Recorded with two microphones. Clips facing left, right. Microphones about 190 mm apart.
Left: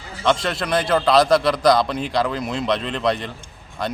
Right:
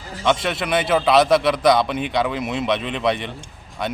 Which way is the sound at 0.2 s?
5° right (ahead or behind).